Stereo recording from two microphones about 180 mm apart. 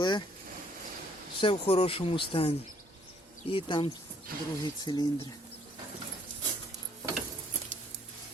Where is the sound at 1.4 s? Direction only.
30° left (ahead or behind).